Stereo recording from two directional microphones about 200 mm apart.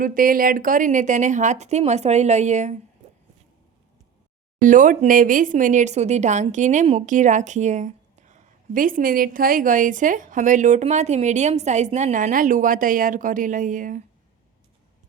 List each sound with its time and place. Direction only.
0.0 s speech: 45° right (ahead or behind)
3.0 s a sound: 35° right (ahead or behind)
4.6 s speech: 40° right (ahead or behind)